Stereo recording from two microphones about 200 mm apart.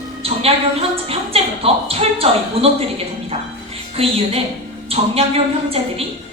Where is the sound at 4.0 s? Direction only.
30° right (ahead or behind).